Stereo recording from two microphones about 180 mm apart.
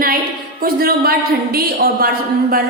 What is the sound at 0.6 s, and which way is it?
A woman's voice, 55° right (ahead or behind).